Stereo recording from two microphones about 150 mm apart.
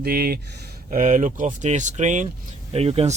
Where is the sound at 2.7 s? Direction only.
40° right (ahead or behind).